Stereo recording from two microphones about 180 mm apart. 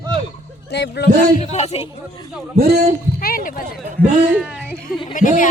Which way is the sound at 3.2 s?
50° left (ahead or behind).